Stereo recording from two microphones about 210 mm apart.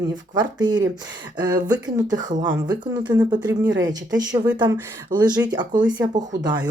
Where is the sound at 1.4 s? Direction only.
20° right (ahead or behind).